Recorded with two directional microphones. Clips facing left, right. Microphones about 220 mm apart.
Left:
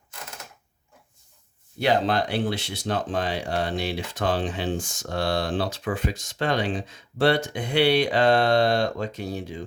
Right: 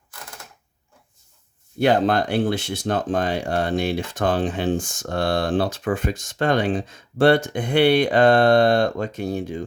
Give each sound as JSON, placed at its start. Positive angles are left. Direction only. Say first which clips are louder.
{"t": 1.8, "sound": "speech", "louder": "right 4 dB", "side_deg": -50}